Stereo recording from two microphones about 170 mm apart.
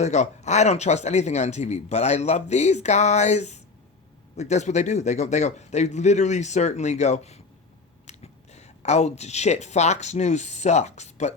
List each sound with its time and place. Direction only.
0.0 s a man's voice: 45° left (ahead or behind)